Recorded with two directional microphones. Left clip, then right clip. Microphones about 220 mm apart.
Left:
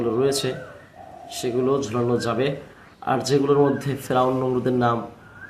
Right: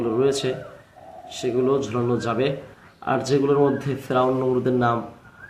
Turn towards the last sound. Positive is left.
turn(degrees=5)  # may be behind; listen again after turning